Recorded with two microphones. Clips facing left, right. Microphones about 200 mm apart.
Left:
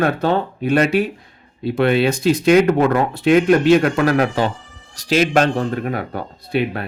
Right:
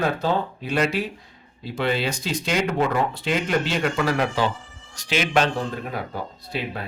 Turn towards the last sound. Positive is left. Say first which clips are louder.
# left 9 dB
turn(degrees=60)  # may be behind; listen again after turning